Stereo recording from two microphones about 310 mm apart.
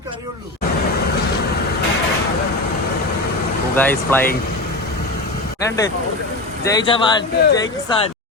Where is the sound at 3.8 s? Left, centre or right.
Centre.